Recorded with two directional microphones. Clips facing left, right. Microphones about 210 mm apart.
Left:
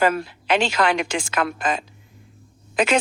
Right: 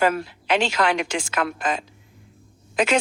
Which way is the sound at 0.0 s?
60° left (ahead or behind).